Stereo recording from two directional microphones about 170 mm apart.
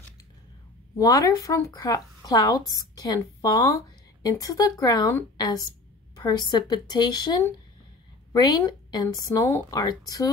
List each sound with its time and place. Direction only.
0.9 s speech: 20° left (ahead or behind)